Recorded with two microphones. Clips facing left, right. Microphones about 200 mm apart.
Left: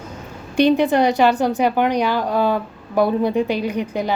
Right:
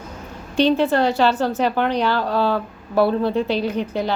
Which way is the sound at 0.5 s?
15° left (ahead or behind).